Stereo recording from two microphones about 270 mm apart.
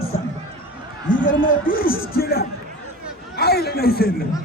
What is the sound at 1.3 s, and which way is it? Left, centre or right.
A man's voice, left.